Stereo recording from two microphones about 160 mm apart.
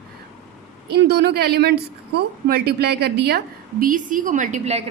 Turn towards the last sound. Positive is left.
turn(degrees=-45)  # may be behind; listen again after turning